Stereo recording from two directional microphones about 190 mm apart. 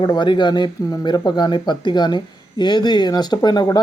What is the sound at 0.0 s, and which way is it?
Speech, 25° left (ahead or behind).